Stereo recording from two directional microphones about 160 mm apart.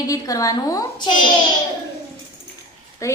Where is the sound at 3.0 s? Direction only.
20° left (ahead or behind).